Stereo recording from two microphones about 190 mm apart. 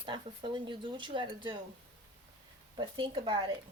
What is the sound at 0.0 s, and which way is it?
Speech, 25° right (ahead or behind).